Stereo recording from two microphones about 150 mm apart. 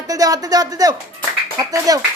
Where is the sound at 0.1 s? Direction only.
25° right (ahead or behind).